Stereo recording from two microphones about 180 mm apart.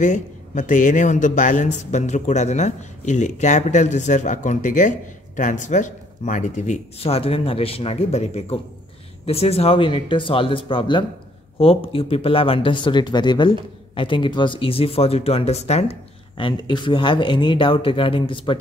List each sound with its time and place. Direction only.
0.0 s a man's voice: 45° left (ahead or behind); by 18.6 s 30° left (ahead or behind)